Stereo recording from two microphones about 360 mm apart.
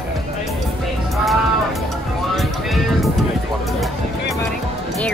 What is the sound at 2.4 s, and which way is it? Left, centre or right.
Music, centre.